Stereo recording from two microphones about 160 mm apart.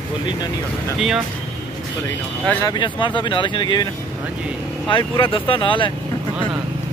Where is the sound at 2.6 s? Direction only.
30° left (ahead or behind).